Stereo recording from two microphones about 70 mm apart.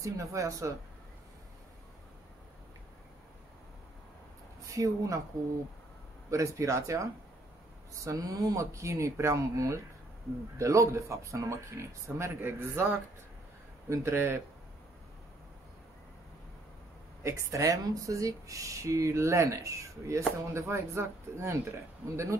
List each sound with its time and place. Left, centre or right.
0.0 s speech: right
4.7 s speech: right
6.3 s speech: right
13.8 s speech: right
17.2 s speech: right